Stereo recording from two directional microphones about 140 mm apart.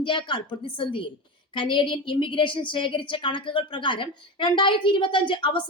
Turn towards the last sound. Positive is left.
turn(degrees=35)  # may be behind; listen again after turning